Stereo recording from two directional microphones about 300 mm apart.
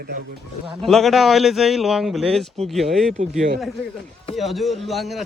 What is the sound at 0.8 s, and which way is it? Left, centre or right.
Speech, centre.